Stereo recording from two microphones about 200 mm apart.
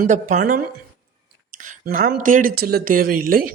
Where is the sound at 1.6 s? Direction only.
45° right (ahead or behind).